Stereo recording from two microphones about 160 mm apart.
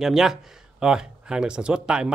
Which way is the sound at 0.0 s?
Centre (ahead or behind).